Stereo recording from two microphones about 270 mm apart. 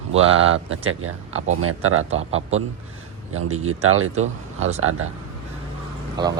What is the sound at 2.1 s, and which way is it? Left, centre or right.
Speech, right.